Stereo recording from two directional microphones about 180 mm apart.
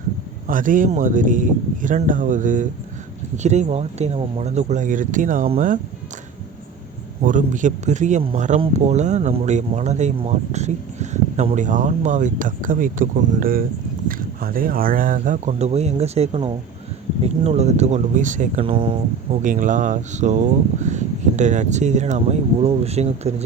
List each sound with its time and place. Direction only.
0.4 s speech: 50° right (ahead or behind)
7.2 s speech: 45° right (ahead or behind)
18.6 s speech: 30° right (ahead or behind)
19.4 s speech: 45° right (ahead or behind)